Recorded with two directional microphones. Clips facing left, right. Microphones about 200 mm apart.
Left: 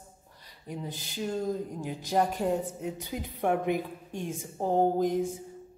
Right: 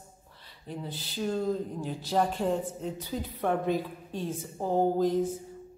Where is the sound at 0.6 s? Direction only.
15° left (ahead or behind).